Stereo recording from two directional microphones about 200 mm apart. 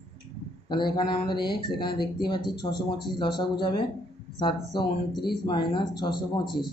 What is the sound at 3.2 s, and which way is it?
Speech, 25° left (ahead or behind).